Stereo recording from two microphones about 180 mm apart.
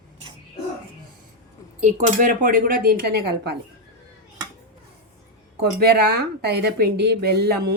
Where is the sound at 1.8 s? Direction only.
40° right (ahead or behind); by 3.6 s 60° right (ahead or behind).